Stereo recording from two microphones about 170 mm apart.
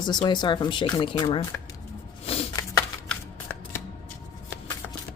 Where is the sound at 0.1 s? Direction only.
25° left (ahead or behind).